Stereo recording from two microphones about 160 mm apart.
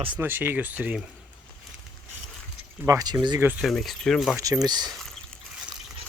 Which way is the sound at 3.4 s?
10° right (ahead or behind).